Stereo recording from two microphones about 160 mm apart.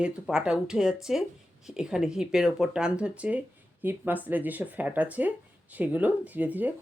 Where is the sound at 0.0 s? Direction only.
5° right (ahead or behind).